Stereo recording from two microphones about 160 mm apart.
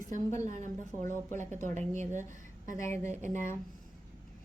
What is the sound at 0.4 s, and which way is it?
Speech, 50° right (ahead or behind).